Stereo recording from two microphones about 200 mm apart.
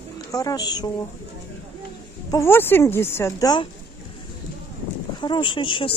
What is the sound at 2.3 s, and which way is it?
Speech, 10° left (ahead or behind).